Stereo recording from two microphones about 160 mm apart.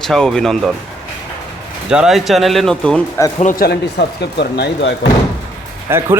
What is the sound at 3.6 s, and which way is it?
Speech, 90° left.